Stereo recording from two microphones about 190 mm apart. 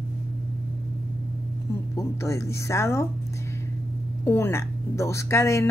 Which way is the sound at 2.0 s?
15° left (ahead or behind).